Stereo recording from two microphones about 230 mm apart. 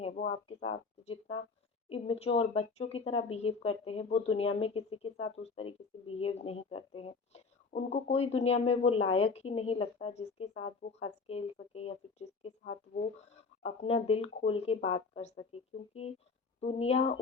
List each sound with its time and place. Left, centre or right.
0.3 s speech: left